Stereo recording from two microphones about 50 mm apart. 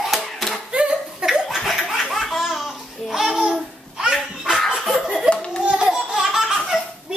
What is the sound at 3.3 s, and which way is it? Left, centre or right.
Babbling, centre.